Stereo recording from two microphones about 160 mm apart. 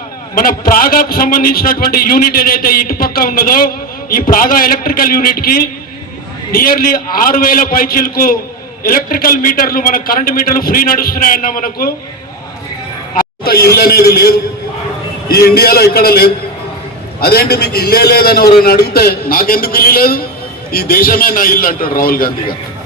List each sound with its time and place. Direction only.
0.3 s a man's voice: 65° left (ahead or behind)
13.4 s a man's voice: 75° left (ahead or behind)